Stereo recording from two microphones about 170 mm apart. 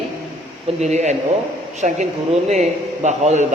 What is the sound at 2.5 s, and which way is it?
Speech, 40° right (ahead or behind).